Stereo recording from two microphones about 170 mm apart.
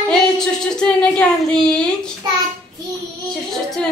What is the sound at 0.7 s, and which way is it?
Speech, 5° left (ahead or behind).